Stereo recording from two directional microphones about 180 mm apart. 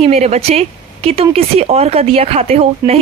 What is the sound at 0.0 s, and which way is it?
Speech, 35° right (ahead or behind).